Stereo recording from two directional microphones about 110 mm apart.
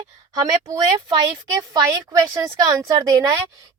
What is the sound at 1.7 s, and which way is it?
Speech, 30° right (ahead or behind).